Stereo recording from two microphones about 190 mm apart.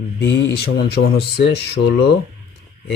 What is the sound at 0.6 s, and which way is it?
Speech, 60° left (ahead or behind).